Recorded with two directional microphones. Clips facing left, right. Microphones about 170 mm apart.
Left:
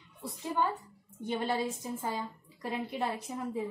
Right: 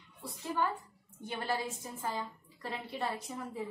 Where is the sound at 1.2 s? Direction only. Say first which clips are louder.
Left 4 dB; 20° left (ahead or behind).